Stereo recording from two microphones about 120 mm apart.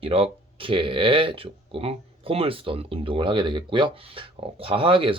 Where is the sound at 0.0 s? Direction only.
50° right (ahead or behind).